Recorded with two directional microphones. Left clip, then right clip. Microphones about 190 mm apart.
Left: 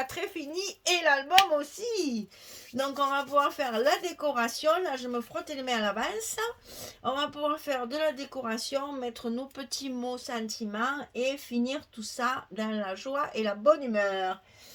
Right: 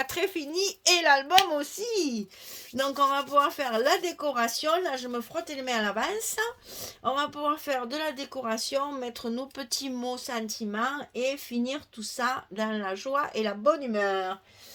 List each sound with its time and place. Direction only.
0.0 s speech: 45° right (ahead or behind)